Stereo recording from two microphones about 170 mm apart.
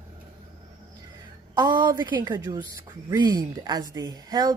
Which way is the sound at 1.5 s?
25° right (ahead or behind).